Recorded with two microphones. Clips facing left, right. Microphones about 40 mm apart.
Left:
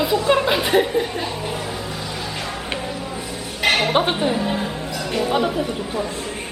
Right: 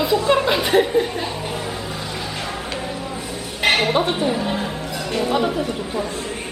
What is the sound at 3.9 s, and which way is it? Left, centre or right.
Speech, left.